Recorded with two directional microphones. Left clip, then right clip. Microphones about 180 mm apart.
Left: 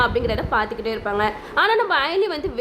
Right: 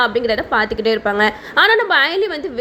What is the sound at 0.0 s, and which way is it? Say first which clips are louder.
A woman's voice: right 4 dB; 15° right (ahead or behind).